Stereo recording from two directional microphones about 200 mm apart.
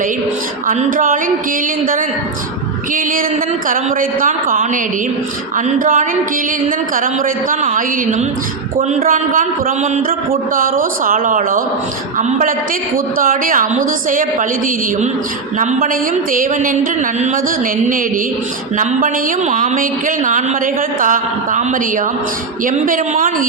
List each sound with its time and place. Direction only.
0.7 s a man's voice: 45° right (ahead or behind)
2.9 s a man's voice: 45° right (ahead or behind)
15.5 s a woman's voice: 40° right (ahead or behind)
18.8 s a woman's voice: 40° right (ahead or behind)